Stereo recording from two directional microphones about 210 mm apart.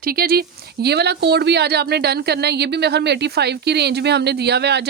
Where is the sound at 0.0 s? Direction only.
45° right (ahead or behind).